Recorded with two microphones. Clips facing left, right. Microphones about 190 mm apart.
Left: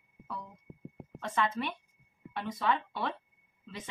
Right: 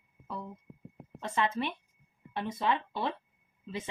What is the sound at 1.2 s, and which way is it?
Speech, 25° right (ahead or behind).